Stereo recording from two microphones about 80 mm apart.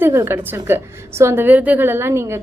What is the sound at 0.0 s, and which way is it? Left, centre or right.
A woman's voice, right.